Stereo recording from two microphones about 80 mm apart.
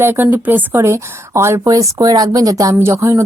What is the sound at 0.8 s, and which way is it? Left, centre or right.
A woman's voice, right.